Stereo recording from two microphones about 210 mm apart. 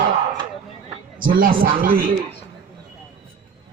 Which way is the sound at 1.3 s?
40° right (ahead or behind).